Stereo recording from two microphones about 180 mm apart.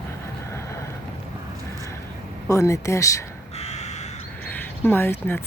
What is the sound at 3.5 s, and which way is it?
Crow, 35° left (ahead or behind).